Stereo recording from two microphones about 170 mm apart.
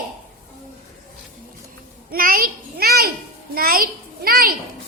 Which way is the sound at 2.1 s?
60° right (ahead or behind).